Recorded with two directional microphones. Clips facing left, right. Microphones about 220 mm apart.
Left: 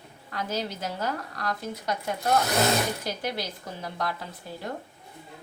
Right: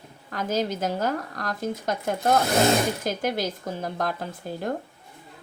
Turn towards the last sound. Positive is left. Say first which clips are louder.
# right 6 dB
turn(degrees=-50)  # may be behind; listen again after turning